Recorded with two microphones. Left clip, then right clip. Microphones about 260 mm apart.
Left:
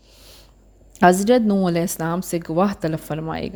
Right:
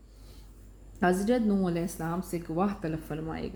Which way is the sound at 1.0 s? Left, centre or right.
Left.